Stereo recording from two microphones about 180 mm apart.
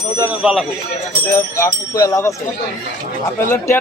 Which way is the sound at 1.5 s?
20° left (ahead or behind).